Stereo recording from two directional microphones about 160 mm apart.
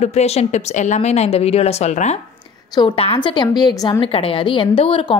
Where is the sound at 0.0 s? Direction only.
45° left (ahead or behind).